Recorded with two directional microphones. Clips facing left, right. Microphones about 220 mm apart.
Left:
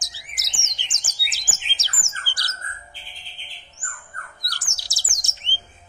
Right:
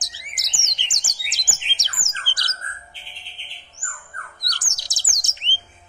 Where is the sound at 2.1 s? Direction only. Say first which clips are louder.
Right 1 dB; 20° right (ahead or behind).